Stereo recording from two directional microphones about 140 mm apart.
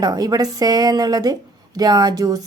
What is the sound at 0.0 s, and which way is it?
Speech, 30° right (ahead or behind).